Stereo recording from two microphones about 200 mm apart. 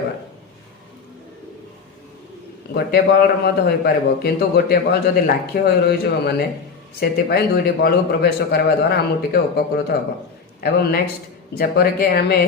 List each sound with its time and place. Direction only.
2.7 s a man's voice: 50° left (ahead or behind)